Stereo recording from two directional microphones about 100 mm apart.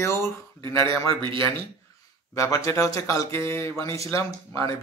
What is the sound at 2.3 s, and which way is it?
Speech, 35° left (ahead or behind).